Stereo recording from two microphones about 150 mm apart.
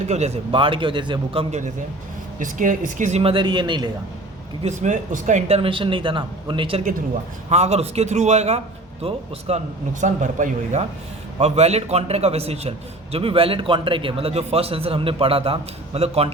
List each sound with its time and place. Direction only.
0.1 s a man's voice: 45° right (ahead or behind)
2.4 s a man's voice: 60° right (ahead or behind); by 3.8 s 30° right (ahead or behind)
4.6 s a man's voice: 50° right (ahead or behind)
5.5 s a man's voice: 40° right (ahead or behind)
7.5 s a man's voice: 45° right (ahead or behind)
10.0 s a man's voice: 55° right (ahead or behind)